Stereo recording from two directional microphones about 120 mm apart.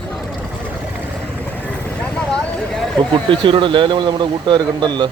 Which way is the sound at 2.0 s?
5° left (ahead or behind).